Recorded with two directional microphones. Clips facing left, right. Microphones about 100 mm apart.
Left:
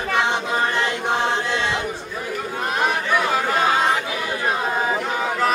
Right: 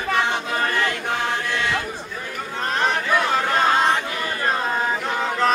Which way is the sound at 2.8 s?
10° left (ahead or behind).